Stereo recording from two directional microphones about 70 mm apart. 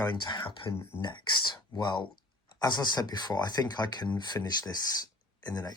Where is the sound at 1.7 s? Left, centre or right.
Left.